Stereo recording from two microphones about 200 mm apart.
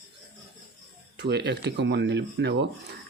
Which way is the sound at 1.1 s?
55° right (ahead or behind).